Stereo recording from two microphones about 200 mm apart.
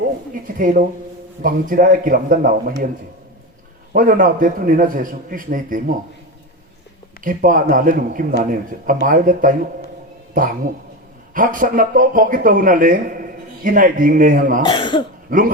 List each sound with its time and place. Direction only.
0.4 s speech: 45° right (ahead or behind)
3.9 s speech: 45° right (ahead or behind)
7.3 s speech: 45° right (ahead or behind)
11.3 s speech: 40° right (ahead or behind)
14.6 s speech: 25° left (ahead or behind)
15.3 s speech: 45° right (ahead or behind)